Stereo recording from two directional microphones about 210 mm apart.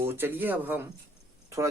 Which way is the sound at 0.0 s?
10° right (ahead or behind).